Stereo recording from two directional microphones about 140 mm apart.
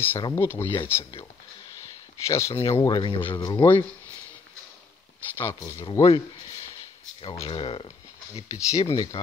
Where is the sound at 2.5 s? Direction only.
40° left (ahead or behind).